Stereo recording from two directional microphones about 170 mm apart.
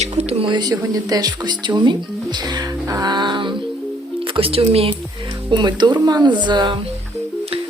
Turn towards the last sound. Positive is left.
turn(degrees=-25)  # may be behind; listen again after turning